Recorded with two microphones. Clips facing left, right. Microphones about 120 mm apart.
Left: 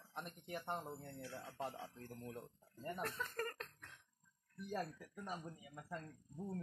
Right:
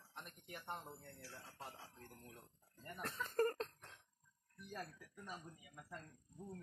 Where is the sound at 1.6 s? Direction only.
50° left (ahead or behind).